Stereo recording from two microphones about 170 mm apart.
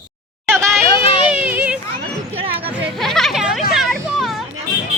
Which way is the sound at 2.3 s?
35° right (ahead or behind).